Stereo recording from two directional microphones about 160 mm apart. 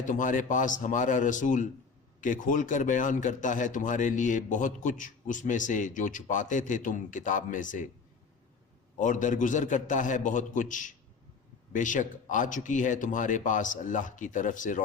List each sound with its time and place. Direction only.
0.1 s a man's voice: 55° left (ahead or behind)
9.0 s a man's voice: 50° left (ahead or behind)